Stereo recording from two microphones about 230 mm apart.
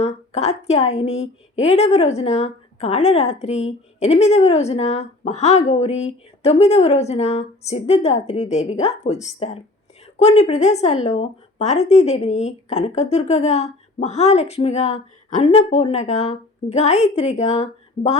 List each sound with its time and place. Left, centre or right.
0.0 s a woman's voice: left